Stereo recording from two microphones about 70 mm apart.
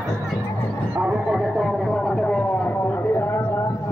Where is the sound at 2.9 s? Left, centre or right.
Left.